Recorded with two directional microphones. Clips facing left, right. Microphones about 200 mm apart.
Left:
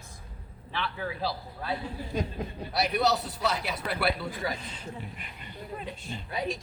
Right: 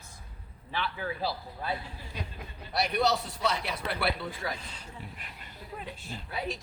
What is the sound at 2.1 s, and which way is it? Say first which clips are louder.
Speech: left 10 dB; 45° left (ahead or behind).